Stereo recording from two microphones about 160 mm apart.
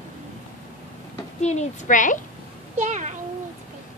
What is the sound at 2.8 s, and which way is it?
Speech, 50° right (ahead or behind).